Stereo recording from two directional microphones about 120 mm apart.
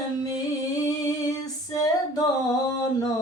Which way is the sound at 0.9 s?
30° left (ahead or behind).